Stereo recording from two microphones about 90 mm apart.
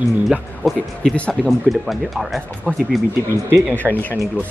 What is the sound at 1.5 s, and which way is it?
Speech, centre (ahead or behind).